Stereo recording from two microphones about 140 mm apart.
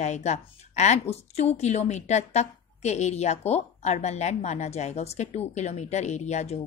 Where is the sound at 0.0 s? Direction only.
55° left (ahead or behind).